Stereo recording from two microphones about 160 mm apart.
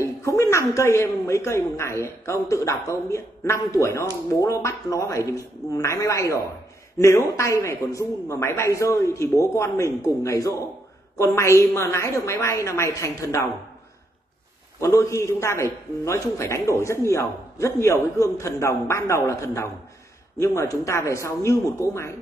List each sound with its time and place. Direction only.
0.0 s a woman's voice: 20° left (ahead or behind)
14.8 s a woman's voice: 20° left (ahead or behind)